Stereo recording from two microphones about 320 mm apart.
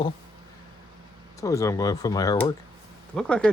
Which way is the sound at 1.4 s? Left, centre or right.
Centre.